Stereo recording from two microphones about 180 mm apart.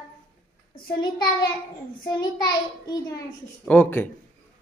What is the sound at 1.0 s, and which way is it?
A child's voice, 25° left (ahead or behind).